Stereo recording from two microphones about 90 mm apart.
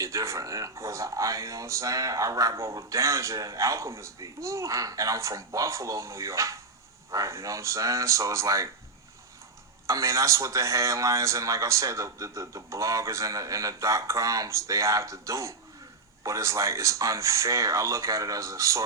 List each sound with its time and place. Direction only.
0.0 s speech: 35° right (ahead or behind)
9.8 s speech: 35° right (ahead or behind)